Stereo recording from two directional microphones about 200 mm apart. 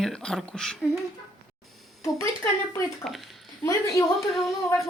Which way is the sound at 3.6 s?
15° left (ahead or behind).